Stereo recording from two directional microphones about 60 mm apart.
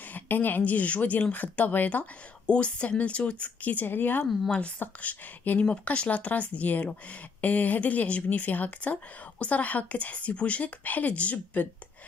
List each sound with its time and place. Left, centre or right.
0.1 s speech: left
4.3 s speech: centre
4.7 s speech: left